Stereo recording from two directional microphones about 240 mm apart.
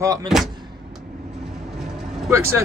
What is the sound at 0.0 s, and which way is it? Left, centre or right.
Speech, centre.